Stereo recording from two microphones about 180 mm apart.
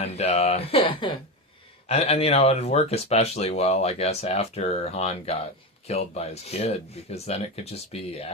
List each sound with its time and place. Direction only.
0.0 s speech: 35° left (ahead or behind)